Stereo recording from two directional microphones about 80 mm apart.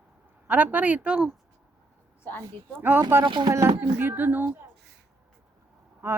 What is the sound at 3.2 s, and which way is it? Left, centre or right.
Speech, right.